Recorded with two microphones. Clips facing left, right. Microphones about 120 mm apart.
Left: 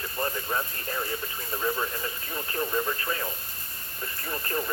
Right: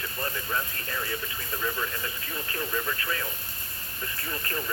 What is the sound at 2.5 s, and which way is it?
Radio, 30° left (ahead or behind).